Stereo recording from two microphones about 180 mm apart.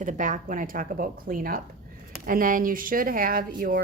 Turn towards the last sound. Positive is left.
turn(degrees=-50)  # may be behind; listen again after turning